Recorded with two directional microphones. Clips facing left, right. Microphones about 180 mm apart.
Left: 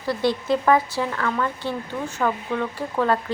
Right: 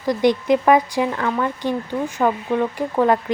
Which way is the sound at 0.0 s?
15° right (ahead or behind).